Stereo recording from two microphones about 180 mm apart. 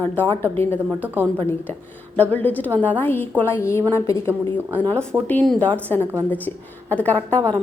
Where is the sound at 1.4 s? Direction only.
10° left (ahead or behind).